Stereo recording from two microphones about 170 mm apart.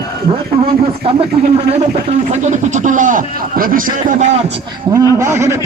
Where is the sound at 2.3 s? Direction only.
45° right (ahead or behind).